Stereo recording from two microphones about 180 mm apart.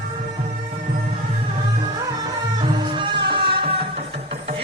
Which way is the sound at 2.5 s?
25° right (ahead or behind).